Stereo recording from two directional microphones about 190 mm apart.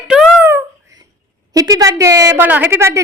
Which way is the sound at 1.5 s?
20° right (ahead or behind).